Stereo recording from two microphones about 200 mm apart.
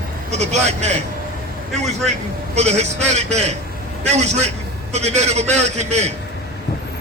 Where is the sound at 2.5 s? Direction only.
35° right (ahead or behind).